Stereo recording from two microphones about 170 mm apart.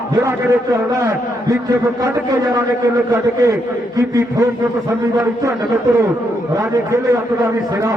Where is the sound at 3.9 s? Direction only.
20° right (ahead or behind).